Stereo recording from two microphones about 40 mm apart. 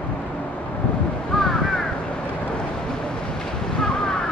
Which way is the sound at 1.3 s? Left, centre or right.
Centre.